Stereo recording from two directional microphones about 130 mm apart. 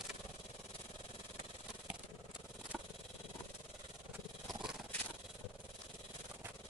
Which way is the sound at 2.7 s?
Centre (ahead or behind).